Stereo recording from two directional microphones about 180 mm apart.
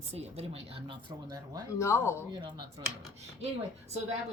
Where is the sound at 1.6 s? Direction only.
15° left (ahead or behind).